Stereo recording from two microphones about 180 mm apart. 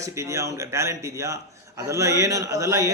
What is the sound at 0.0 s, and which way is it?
A man's voice, 15° right (ahead or behind).